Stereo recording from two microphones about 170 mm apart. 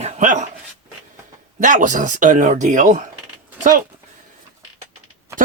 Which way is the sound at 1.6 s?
50° right (ahead or behind).